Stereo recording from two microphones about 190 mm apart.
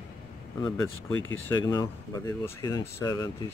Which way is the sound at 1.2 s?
90° left.